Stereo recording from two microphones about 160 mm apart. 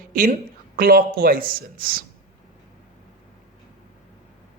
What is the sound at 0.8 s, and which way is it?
A woman's voice, 70° right (ahead or behind).